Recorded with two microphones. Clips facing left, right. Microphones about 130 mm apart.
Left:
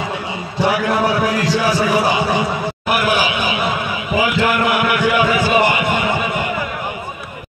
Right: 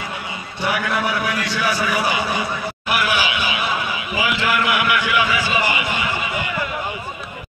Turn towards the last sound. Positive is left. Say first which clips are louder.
# left 5 dB
turn(degrees=45)  # may be behind; listen again after turning